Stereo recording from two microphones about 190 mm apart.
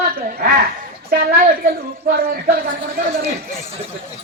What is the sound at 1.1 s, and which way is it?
A woman's voice, 50° right (ahead or behind).